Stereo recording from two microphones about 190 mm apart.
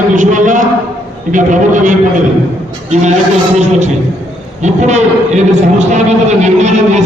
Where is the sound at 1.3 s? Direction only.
40° right (ahead or behind).